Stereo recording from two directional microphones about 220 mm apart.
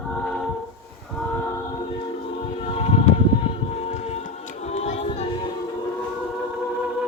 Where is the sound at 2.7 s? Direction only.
25° left (ahead or behind).